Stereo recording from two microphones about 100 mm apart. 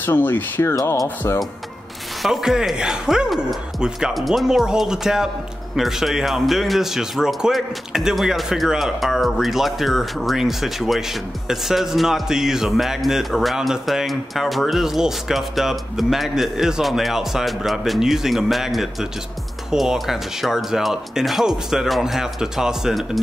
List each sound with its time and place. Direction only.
0.0 s speech: 20° left (ahead or behind)
0.7 s speech: 35° left (ahead or behind)
1.0 s speech: 20° left (ahead or behind)
2.2 s a man's voice: 5° right (ahead or behind)